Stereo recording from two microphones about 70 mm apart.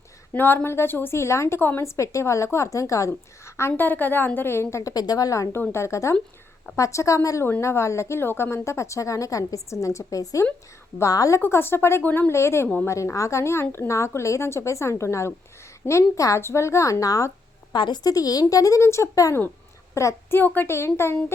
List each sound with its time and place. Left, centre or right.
0.3 s a woman's voice: left
11.3 s a woman's voice: left
17.7 s a child's voice: left
20.3 s a woman's voice: left